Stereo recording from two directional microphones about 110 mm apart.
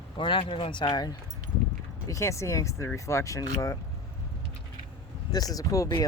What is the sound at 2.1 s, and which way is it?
Speech, 25° left (ahead or behind).